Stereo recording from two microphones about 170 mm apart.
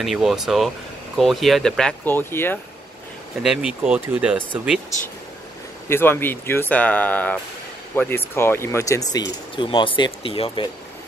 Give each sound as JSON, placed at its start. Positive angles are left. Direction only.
{"t": 0.0, "sound": "speech", "side_deg": 0}
{"t": 3.4, "sound": "speech", "side_deg": -5}
{"t": 5.9, "sound": "speech", "side_deg": 15}